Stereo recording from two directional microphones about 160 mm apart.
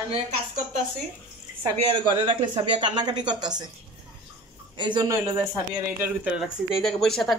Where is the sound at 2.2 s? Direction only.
30° right (ahead or behind).